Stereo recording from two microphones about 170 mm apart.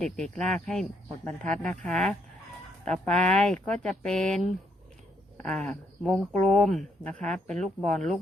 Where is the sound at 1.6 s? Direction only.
5° left (ahead or behind).